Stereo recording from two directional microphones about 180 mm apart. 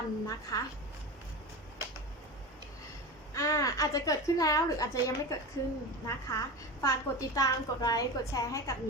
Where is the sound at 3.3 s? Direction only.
15° left (ahead or behind).